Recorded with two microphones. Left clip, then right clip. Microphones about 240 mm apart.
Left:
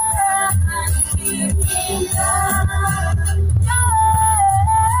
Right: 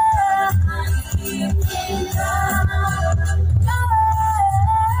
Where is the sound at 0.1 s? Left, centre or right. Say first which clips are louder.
Right 1 dB; left.